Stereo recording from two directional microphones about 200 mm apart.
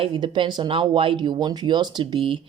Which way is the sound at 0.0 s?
25° right (ahead or behind).